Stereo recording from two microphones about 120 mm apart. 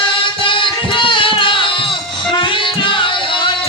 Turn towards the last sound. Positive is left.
turn(degrees=45)  # may be behind; listen again after turning